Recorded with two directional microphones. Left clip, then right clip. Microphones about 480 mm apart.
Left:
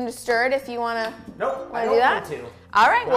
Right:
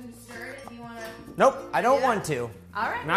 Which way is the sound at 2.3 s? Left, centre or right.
Right.